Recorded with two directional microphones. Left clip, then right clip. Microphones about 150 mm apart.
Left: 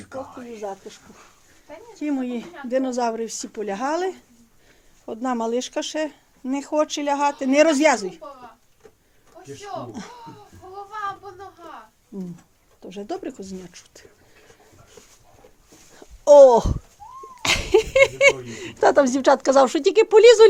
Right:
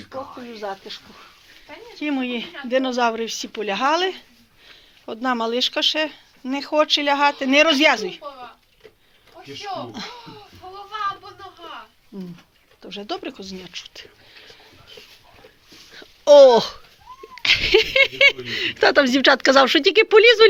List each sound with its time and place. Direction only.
0.6 s speech: 10° left (ahead or behind)
2.0 s speech: 15° left (ahead or behind)
13.3 s speech: 40° left (ahead or behind)
13.6 s speech: 25° left (ahead or behind)
16.0 s wail: 25° left (ahead or behind)
17.4 s speech: 10° left (ahead or behind)